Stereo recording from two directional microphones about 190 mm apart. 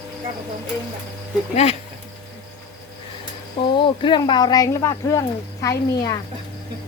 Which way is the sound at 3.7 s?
25° left (ahead or behind).